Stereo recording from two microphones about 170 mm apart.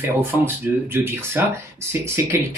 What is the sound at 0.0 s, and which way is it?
Speech, 10° right (ahead or behind).